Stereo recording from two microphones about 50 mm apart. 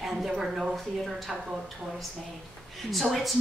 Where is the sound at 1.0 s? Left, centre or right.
Centre.